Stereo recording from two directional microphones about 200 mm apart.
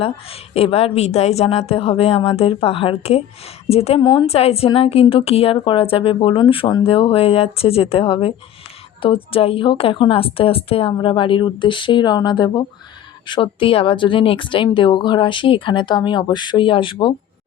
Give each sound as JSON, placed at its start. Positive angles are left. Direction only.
{"t": 0.0, "sound": "a woman's voice", "side_deg": 30}